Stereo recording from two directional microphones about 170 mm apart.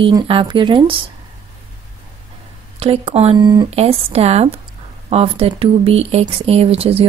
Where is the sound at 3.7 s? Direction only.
35° right (ahead or behind).